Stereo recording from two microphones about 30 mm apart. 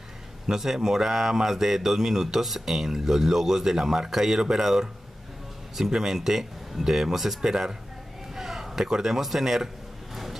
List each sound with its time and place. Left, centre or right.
0.5 s speech: centre
5.9 s a man's voice: centre